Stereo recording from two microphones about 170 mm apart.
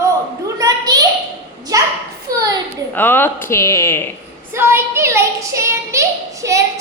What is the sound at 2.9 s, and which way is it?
Speech, 10° left (ahead or behind).